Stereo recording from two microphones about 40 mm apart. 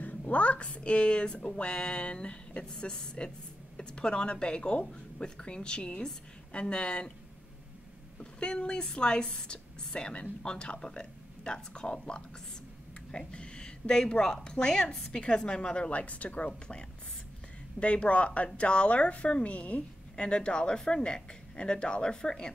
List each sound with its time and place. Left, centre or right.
0.0 s a woman's voice: left
8.2 s a woman's voice: left
17.7 s speech: left